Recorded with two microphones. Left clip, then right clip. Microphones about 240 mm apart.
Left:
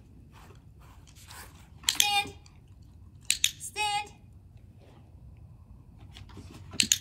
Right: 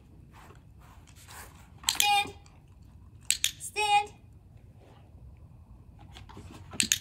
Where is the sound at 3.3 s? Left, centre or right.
Centre.